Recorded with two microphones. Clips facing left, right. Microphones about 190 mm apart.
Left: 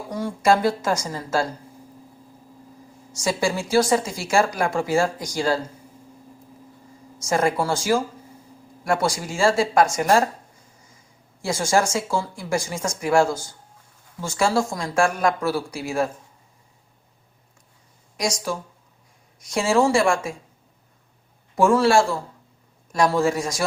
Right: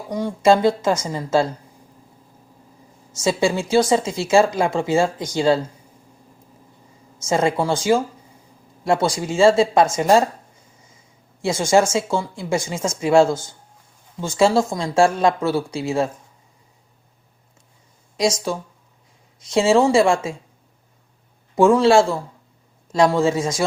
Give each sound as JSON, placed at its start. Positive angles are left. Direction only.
{"t": 0.1, "sound": "speech", "side_deg": -20}
{"t": 3.2, "sound": "speech", "side_deg": -25}
{"t": 7.3, "sound": "speech", "side_deg": -20}
{"t": 11.4, "sound": "speech", "side_deg": -20}
{"t": 19.4, "sound": "speech", "side_deg": -25}
{"t": 21.5, "sound": "speech", "side_deg": -20}